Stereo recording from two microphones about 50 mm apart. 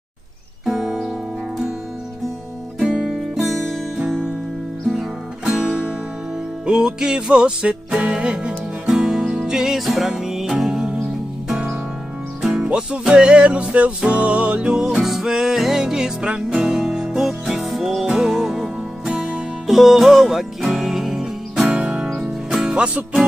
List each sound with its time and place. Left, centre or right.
0.7 s music: centre
2.8 s music: centre
3.3 s music: centre
5.4 s music: centre
21.7 s music: centre